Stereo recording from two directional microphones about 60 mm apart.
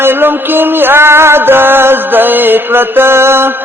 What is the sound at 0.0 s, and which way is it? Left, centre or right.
Mantra, right.